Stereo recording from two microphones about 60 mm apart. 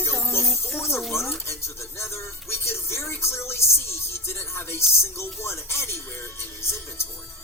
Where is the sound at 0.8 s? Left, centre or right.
Left.